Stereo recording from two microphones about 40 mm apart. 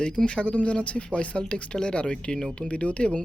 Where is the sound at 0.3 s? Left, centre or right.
Left.